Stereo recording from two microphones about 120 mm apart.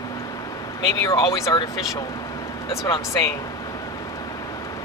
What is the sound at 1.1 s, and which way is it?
Speech, 25° left (ahead or behind).